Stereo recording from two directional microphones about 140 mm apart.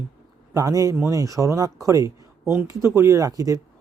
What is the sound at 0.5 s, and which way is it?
Speech, 25° right (ahead or behind).